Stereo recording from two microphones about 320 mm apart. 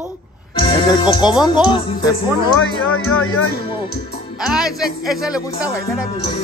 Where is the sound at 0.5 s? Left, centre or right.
Centre.